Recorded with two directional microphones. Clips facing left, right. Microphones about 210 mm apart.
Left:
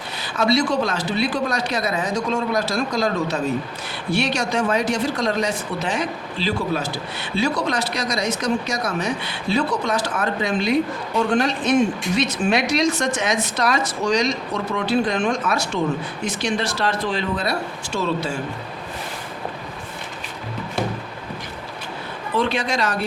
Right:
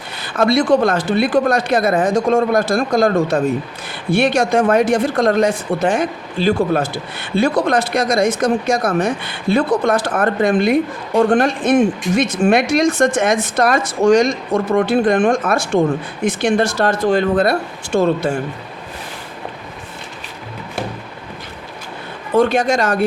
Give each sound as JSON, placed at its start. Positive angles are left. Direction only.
{"t": 0.2, "sound": "speech", "side_deg": -55}
{"t": 22.4, "sound": "speech", "side_deg": -45}